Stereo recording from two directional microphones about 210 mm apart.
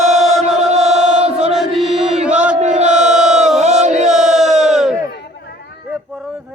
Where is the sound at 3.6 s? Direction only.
35° right (ahead or behind).